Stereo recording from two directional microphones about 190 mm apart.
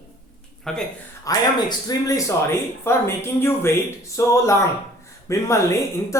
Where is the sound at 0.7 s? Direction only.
5° left (ahead or behind).